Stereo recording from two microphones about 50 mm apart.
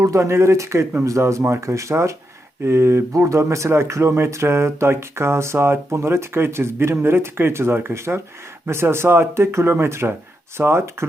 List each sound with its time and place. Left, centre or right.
0.0 s speech: right
1.0 s speech: right
2.6 s speech: right